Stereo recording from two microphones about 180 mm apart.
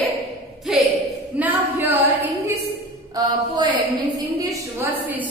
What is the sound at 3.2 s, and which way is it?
Speech, 20° right (ahead or behind).